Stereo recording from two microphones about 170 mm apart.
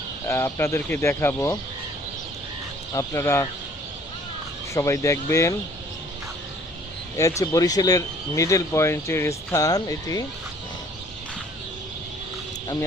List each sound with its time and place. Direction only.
0.3 s speech: 15° left (ahead or behind)
2.9 s speech: 15° left (ahead or behind)
4.7 s speech: 15° left (ahead or behind)
7.2 s speech: 20° left (ahead or behind)